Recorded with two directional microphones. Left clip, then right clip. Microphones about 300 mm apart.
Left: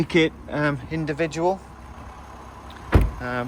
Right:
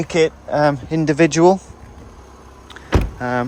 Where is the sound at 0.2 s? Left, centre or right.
Centre.